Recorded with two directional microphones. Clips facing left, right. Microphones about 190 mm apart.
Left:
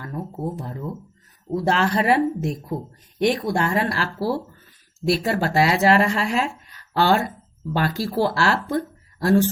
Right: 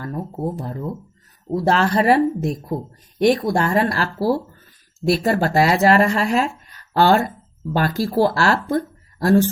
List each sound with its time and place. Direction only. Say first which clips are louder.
0.0 s speech: right 3 dB; 35° right (ahead or behind)